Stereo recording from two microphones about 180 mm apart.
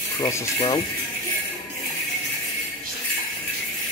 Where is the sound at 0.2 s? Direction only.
20° left (ahead or behind).